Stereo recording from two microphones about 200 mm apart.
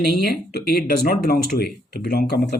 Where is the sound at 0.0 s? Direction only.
50° left (ahead or behind).